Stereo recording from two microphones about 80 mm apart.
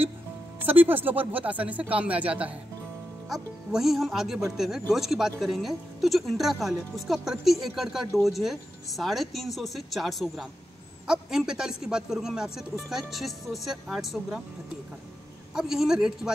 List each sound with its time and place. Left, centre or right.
0.6 s speech: right
3.3 s a man's voice: centre
15.5 s a man's voice: centre